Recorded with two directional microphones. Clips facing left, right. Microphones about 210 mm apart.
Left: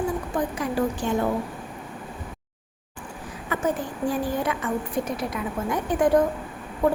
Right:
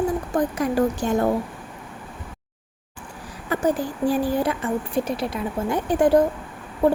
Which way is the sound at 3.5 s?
35° right (ahead or behind).